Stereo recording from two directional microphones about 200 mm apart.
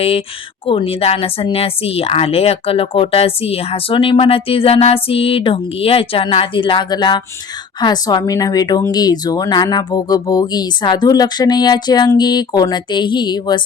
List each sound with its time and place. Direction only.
0.7 s speech: 25° left (ahead or behind)